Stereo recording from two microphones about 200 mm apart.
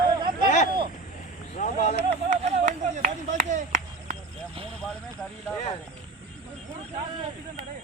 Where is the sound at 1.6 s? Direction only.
35° left (ahead or behind).